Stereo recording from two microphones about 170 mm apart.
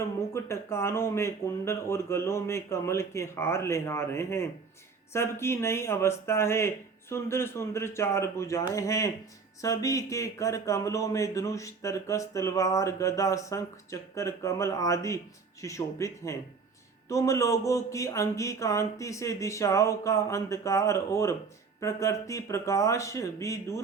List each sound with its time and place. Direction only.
0.0 s speech: 15° left (ahead or behind)